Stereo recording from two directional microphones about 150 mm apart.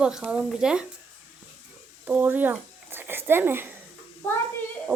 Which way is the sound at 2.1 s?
10° right (ahead or behind).